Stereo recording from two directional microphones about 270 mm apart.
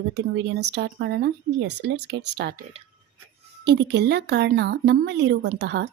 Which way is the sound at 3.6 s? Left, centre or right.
Right.